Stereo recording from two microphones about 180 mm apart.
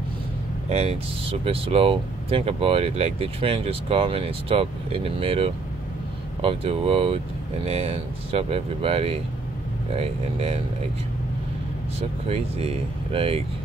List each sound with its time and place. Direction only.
0.7 s speech: 35° right (ahead or behind)
12.3 s speech: 35° right (ahead or behind)